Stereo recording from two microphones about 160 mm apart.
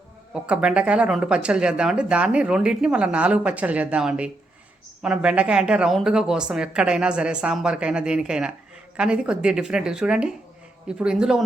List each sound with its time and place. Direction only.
0.4 s a woman's voice: 5° right (ahead or behind)